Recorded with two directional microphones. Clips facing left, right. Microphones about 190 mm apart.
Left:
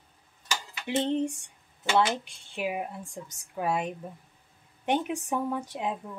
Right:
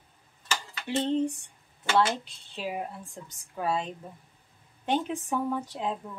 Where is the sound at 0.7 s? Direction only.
15° left (ahead or behind).